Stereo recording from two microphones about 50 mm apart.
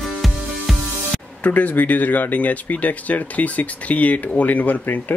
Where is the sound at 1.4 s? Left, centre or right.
Left.